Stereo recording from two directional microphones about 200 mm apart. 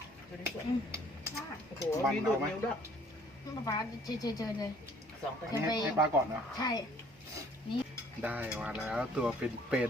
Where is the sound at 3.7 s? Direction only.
20° left (ahead or behind).